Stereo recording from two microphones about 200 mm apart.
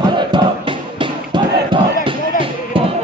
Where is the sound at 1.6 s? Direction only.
25° right (ahead or behind).